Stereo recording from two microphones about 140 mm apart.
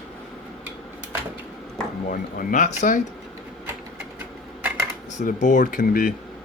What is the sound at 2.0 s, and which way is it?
Speech, 70° left (ahead or behind).